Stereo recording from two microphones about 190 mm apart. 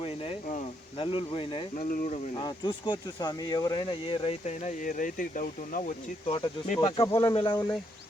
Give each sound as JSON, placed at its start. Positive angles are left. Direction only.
{"t": 0.0, "sound": "speech", "side_deg": 30}
{"t": 6.2, "sound": "speech", "side_deg": 30}